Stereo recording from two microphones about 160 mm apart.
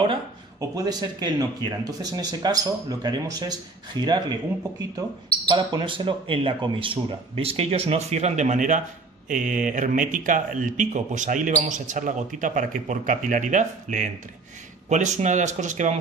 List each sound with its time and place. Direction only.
0.6 s speech: 25° right (ahead or behind); by 16.0 s 50° right (ahead or behind)